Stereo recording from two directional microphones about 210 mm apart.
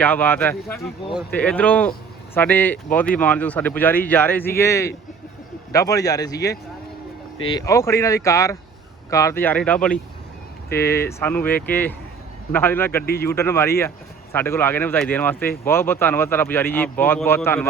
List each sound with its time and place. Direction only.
0.0 s speech: 10° left (ahead or behind)